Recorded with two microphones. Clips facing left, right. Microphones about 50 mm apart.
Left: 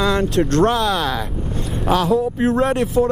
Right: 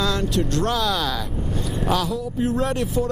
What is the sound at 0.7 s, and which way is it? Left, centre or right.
Speech, left.